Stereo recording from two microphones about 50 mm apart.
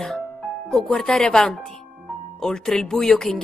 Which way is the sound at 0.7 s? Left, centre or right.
Centre.